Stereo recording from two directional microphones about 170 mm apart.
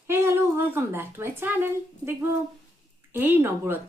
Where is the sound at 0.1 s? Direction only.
15° right (ahead or behind).